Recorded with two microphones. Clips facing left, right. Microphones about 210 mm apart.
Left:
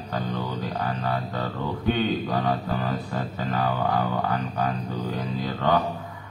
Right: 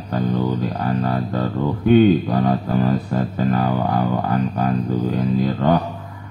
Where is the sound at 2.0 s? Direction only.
45° right (ahead or behind).